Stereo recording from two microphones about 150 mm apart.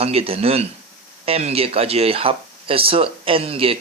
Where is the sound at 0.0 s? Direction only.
40° right (ahead or behind).